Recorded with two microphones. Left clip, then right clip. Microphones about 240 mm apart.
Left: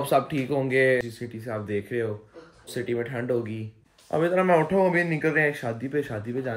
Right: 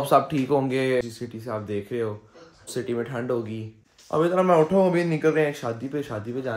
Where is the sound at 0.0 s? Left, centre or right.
Centre.